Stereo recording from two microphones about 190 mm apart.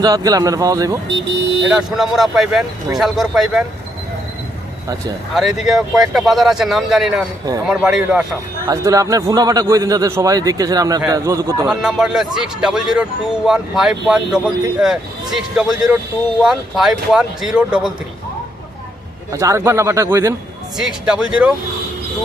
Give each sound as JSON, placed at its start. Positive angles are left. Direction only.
{"t": 0.0, "sound": "speech", "side_deg": -20}
{"t": 1.0, "sound": "speech", "side_deg": -65}
{"t": 1.7, "sound": "speech", "side_deg": 0}
{"t": 5.3, "sound": "speech", "side_deg": 0}
{"t": 8.6, "sound": "a man's voice", "side_deg": -20}
{"t": 11.7, "sound": "speech", "side_deg": -5}
{"t": 19.3, "sound": "a man's voice", "side_deg": -15}
{"t": 20.7, "sound": "speech", "side_deg": -5}